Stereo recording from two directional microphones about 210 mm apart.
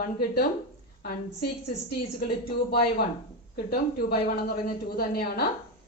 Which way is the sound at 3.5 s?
45° left (ahead or behind).